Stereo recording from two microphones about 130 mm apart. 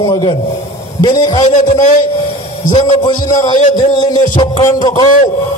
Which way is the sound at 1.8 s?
70° left (ahead or behind).